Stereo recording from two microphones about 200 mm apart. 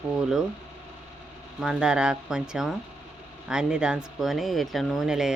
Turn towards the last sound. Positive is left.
turn(degrees=0)  # may be behind; listen again after turning